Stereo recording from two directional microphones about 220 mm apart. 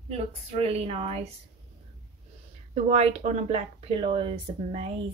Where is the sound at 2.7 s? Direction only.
30° right (ahead or behind).